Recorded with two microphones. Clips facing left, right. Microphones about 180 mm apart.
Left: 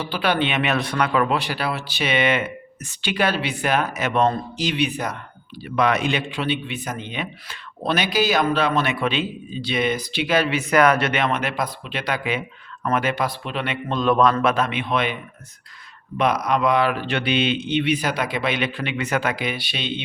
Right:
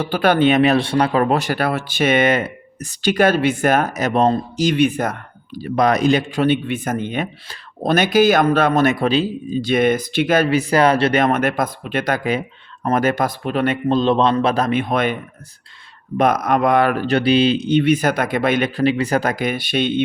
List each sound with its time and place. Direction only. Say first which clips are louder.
0.0 s a man's voice: right 7 dB; 45° right (ahead or behind)
13.8 s a man's voice: right 1 dB; 30° right (ahead or behind); by 20.0 s 50° right (ahead or behind)